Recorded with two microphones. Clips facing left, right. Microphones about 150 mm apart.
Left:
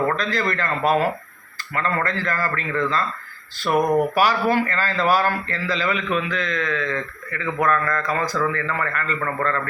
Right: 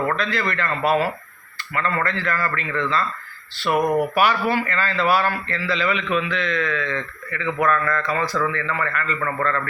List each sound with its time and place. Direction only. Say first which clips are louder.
0.2 s a man's voice: even; 40° left (ahead or behind)
1.7 s a man's voice: even; 40° left (ahead or behind)
3.7 s speech: left 1 dB; 5° right (ahead or behind)
4.1 s a man's voice: left 1 dB; 40° left (ahead or behind)